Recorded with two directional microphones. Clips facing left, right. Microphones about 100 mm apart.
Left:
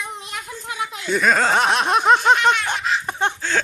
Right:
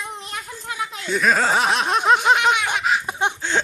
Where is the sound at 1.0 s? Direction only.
Centre (ahead or behind).